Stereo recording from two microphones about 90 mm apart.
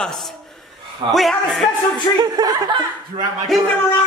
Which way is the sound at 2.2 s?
45° right (ahead or behind).